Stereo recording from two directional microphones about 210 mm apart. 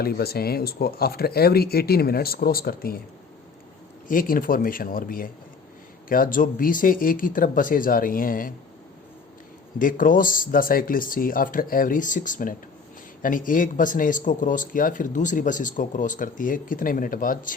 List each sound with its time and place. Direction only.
0.0 s speech: 45° left (ahead or behind)
4.1 s speech: 40° left (ahead or behind)
9.7 s speech: 40° left (ahead or behind)